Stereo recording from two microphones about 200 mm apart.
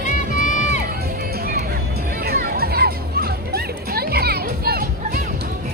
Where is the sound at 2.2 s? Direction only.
50° right (ahead or behind).